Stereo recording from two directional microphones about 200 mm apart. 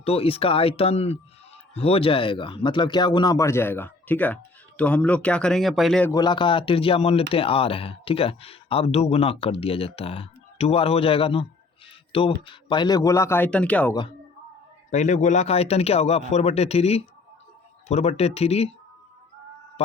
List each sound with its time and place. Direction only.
0.0 s a man's voice: 30° left (ahead or behind); by 6.1 s centre (ahead or behind)
6.1 s speech: 20° left (ahead or behind)
14.8 s speech: 35° left (ahead or behind)